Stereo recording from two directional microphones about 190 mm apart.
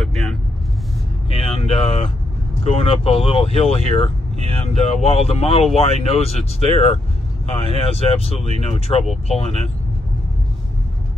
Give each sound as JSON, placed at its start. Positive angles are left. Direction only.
{"t": 0.0, "sound": "vehicle", "side_deg": 0}
{"t": 1.3, "sound": "vehicle", "side_deg": 30}
{"t": 2.6, "sound": "speech", "side_deg": 30}